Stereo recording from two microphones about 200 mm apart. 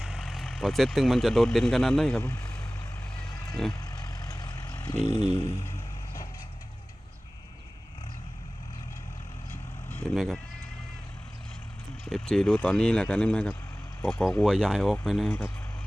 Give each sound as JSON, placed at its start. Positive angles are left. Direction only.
{"t": 0.0, "sound": "speech", "side_deg": 0}
{"t": 3.6, "sound": "speech", "side_deg": 5}
{"t": 3.9, "sound": "vehicle", "side_deg": 20}
{"t": 10.2, "sound": "speech", "side_deg": 0}
{"t": 12.0, "sound": "speech", "side_deg": 5}